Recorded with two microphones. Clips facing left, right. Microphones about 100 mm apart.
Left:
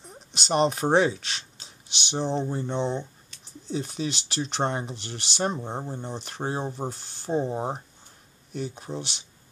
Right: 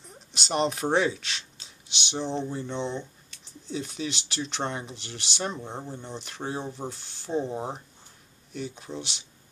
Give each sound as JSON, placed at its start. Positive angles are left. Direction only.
{"t": 0.5, "sound": "speech", "side_deg": 35}
{"t": 8.5, "sound": "speech", "side_deg": 40}